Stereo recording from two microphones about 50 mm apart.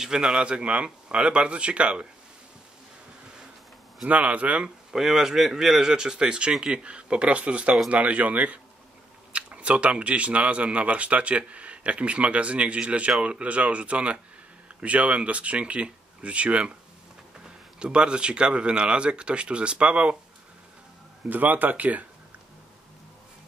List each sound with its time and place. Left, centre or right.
0.0 s speech: centre
4.1 s speech: right
4.9 s speech: centre; by 16.7 s right
17.7 s speech: centre
21.3 s a man's voice: right